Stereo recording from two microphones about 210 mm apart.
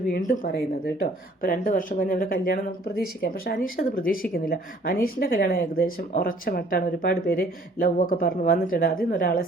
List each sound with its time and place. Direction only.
0.0 s speech: 40° left (ahead or behind)